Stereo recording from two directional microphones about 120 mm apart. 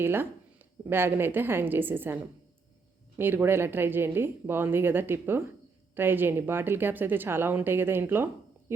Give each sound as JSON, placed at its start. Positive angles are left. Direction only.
{"t": 0.0, "sound": "speech", "side_deg": -20}
{"t": 3.2, "sound": "speech", "side_deg": -20}